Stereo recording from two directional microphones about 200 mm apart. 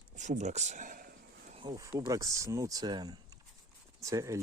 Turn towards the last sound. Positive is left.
turn(degrees=-15)  # may be behind; listen again after turning